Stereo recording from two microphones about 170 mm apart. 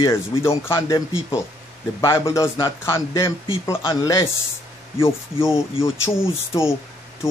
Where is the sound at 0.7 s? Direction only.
25° left (ahead or behind).